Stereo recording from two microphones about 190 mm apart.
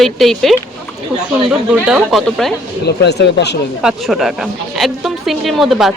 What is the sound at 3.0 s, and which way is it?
Speech, 60° left (ahead or behind).